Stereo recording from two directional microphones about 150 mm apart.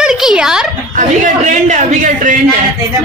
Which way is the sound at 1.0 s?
55° right (ahead or behind).